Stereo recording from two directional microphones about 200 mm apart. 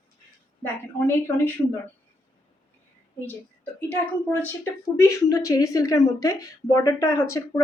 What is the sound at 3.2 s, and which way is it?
A woman's voice, 10° left (ahead or behind).